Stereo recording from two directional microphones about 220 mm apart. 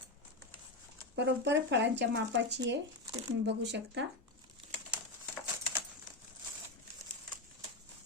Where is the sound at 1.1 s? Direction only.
50° right (ahead or behind).